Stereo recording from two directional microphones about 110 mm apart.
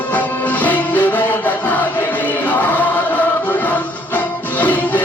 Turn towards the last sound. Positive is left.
turn(degrees=15)  # may be behind; listen again after turning